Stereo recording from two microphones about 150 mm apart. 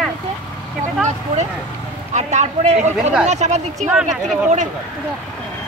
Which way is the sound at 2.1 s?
50° right (ahead or behind).